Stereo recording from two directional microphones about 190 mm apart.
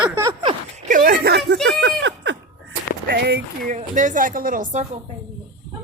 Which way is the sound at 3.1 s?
60° right (ahead or behind).